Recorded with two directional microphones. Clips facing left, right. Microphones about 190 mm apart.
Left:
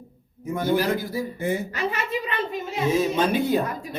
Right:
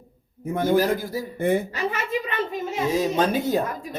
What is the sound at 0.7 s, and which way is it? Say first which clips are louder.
Speech: right 2 dB; 45° right (ahead or behind).